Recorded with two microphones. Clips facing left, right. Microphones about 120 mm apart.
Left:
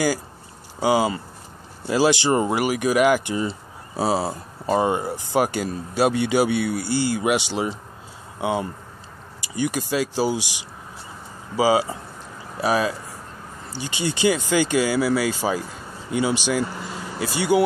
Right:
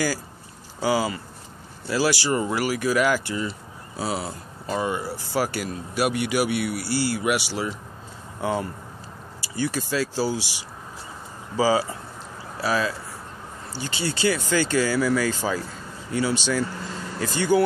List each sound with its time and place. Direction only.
0.7 s speech: 20° left (ahead or behind)